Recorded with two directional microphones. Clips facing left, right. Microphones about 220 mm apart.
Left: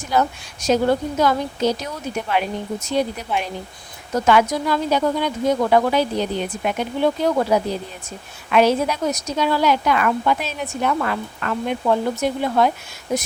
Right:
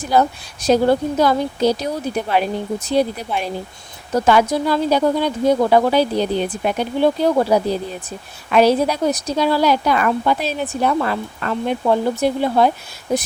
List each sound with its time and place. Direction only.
0.1 s a woman's voice: 35° right (ahead or behind)